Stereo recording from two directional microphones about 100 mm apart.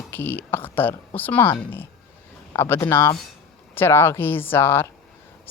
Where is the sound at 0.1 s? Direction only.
20° left (ahead or behind).